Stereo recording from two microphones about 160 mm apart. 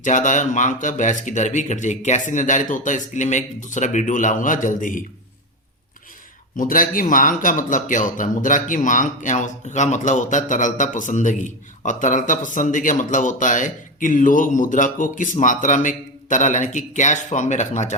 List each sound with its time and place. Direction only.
0.0 s a man's voice: 50° left (ahead or behind)
6.6 s a man's voice: 60° left (ahead or behind)